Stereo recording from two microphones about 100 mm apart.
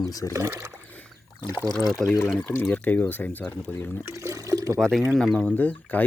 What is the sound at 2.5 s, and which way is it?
Speech, 15° left (ahead or behind).